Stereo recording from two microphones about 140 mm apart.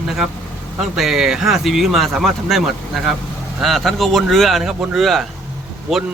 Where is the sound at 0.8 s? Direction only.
Centre (ahead or behind).